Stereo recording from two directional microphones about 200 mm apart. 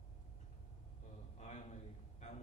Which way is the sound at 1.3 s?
35° left (ahead or behind).